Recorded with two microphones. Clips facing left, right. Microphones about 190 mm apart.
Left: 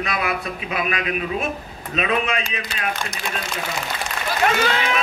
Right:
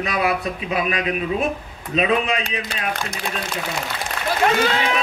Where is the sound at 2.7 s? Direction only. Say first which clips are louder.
Right 1 dB; 60° right (ahead or behind).